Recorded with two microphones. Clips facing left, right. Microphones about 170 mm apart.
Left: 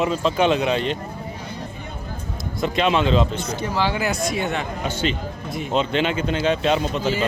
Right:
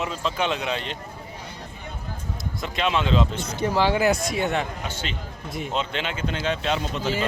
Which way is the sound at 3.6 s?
50° right (ahead or behind).